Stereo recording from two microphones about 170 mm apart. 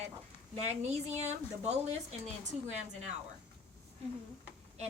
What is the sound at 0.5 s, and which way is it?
A woman's voice, 40° right (ahead or behind).